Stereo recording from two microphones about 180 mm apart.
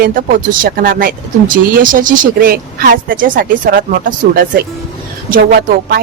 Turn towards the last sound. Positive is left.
turn(degrees=-50)  # may be behind; listen again after turning